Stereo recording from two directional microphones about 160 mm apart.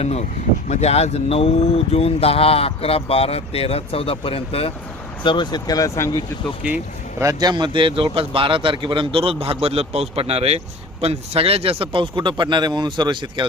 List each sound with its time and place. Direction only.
0.0 s speech: 40° left (ahead or behind); by 6.2 s 20° left (ahead or behind)
6.6 s speech: 5° right (ahead or behind)
7.2 s a man's voice: 20° right (ahead or behind)